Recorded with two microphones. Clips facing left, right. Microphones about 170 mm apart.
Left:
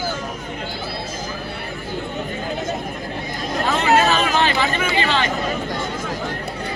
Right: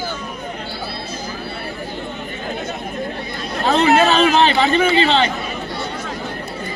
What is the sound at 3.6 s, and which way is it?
Chatter, 35° right (ahead or behind).